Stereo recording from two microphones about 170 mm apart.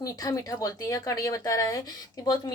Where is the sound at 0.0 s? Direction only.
20° left (ahead or behind).